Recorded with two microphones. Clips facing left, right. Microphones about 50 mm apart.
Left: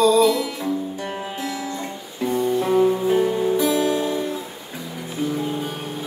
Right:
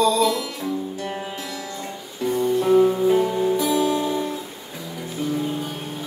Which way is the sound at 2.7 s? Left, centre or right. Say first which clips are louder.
Right 2 dB; centre.